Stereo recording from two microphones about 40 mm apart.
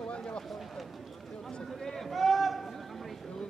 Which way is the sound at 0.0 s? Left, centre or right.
Left.